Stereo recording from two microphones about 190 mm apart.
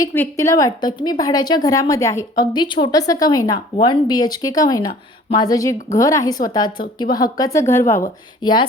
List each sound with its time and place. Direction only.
0.0 s a woman's voice: 15° left (ahead or behind)